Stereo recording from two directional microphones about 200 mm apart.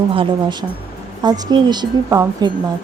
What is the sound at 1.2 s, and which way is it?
Speech, 20° right (ahead or behind).